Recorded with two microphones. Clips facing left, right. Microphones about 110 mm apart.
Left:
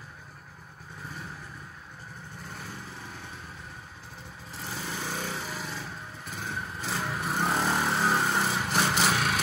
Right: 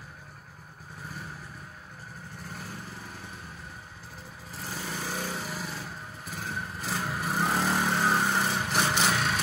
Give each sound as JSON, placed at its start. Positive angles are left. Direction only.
{"t": 2.5, "sound": "lawn mower", "side_deg": 0}
{"t": 4.6, "sound": "lawn mower", "side_deg": 0}